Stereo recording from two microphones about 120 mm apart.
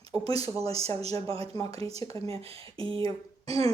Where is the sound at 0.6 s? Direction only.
55° right (ahead or behind).